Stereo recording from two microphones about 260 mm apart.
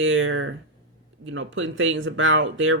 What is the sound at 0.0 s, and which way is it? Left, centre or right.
Speech, right.